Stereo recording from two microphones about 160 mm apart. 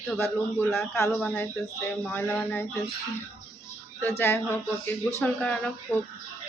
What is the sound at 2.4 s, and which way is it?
Speech, 15° left (ahead or behind).